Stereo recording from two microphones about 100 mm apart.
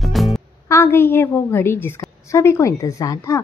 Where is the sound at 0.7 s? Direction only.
25° left (ahead or behind).